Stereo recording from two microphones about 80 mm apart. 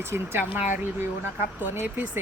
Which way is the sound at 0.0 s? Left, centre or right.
Right.